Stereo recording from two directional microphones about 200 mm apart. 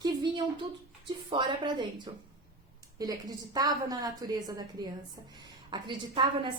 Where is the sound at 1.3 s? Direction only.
25° right (ahead or behind).